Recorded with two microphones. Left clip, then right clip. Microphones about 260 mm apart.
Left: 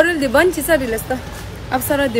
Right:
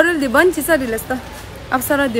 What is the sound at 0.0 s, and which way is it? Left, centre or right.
Speech, centre.